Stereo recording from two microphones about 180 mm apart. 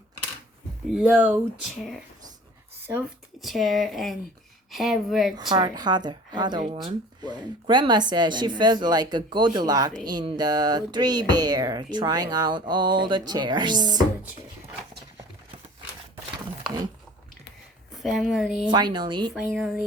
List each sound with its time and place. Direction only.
0.9 s speech: 5° right (ahead or behind)
3.4 s speech: centre (ahead or behind)
5.4 s speech: 25° right (ahead or behind)
17.9 s speech: centre (ahead or behind)
18.7 s speech: 25° right (ahead or behind)
19.3 s speech: centre (ahead or behind)